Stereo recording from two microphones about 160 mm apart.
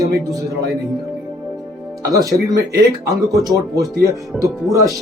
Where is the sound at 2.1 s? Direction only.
20° right (ahead or behind).